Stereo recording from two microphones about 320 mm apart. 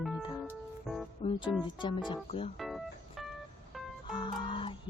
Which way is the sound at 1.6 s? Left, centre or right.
Centre.